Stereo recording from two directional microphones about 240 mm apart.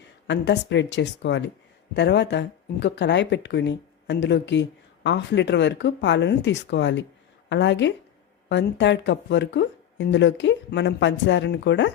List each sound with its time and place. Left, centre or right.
0.3 s speech: left